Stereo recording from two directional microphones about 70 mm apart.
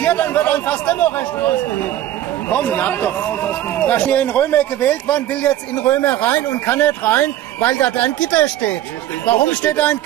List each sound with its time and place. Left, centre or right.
0.0 s a man's voice: left